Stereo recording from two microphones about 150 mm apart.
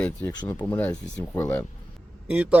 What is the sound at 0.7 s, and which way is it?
Speech, 10° left (ahead or behind).